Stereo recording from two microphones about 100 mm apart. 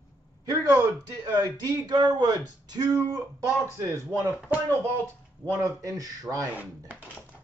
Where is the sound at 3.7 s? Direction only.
30° right (ahead or behind).